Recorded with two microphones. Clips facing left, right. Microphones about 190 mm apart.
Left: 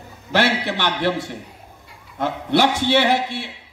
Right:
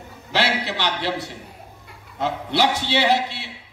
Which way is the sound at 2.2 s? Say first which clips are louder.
Left 3 dB; 50° left (ahead or behind).